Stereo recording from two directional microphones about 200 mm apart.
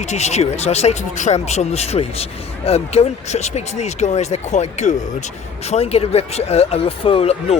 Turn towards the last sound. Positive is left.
turn(degrees=30)  # may be behind; listen again after turning